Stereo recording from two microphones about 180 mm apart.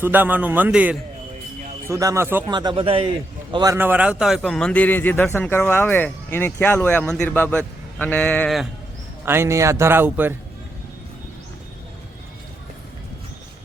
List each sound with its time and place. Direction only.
0.0 s a man's voice: 10° right (ahead or behind)
2.5 s a man's voice: 25° right (ahead or behind)
3.5 s a man's voice: 20° right (ahead or behind); by 8.6 s 5° left (ahead or behind)
9.2 s a man's voice: 15° right (ahead or behind)